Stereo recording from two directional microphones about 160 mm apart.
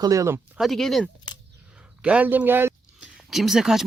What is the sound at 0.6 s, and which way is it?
Speech, centre (ahead or behind).